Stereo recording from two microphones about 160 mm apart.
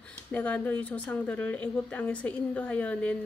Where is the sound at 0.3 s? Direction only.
10° left (ahead or behind).